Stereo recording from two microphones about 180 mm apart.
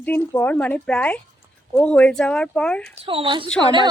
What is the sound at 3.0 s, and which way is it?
Speech, 30° right (ahead or behind).